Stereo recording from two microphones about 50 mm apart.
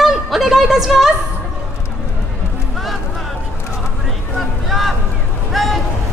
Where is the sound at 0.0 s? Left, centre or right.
Centre.